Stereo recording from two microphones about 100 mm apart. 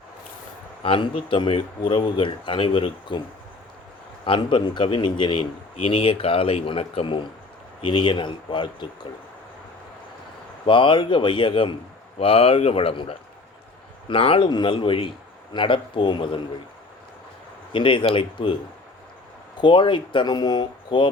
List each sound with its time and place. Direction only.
0.8 s a man's voice: 65° left (ahead or behind)
4.3 s a man's voice: 55° left (ahead or behind)
7.8 s a man's voice: 55° left (ahead or behind)
10.7 s a man's voice: 55° left (ahead or behind)
12.2 s a man's voice: 70° left (ahead or behind)
14.5 s a man's voice: 55° left (ahead or behind)
17.7 s a man's voice: 60° left (ahead or behind)
19.6 s speech: 55° left (ahead or behind)